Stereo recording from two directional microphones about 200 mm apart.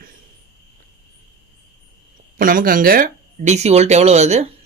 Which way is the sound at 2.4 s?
45° right (ahead or behind).